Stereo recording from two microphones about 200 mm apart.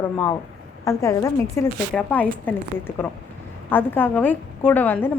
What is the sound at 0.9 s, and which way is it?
A woman's voice, 15° left (ahead or behind).